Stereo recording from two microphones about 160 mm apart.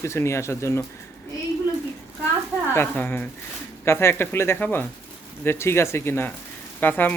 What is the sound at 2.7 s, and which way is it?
Speech, 15° left (ahead or behind).